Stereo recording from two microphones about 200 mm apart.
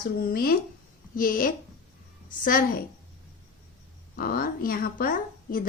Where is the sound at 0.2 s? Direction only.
50° left (ahead or behind).